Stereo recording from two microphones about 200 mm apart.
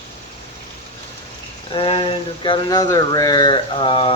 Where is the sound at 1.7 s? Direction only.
25° left (ahead or behind).